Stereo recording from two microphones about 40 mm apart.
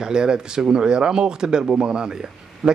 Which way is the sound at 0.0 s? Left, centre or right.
Centre.